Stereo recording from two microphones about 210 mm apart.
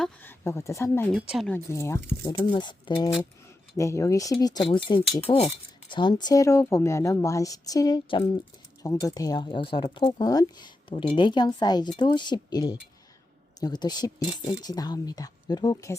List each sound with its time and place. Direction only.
0.0 s speech: 10° left (ahead or behind)
1.1 s speech: centre (ahead or behind)
1.5 s speech: 15° left (ahead or behind)
2.3 s speech: 25° left (ahead or behind)